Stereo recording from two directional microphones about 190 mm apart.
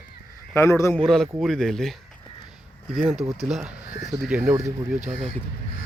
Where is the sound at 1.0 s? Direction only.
Centre (ahead or behind).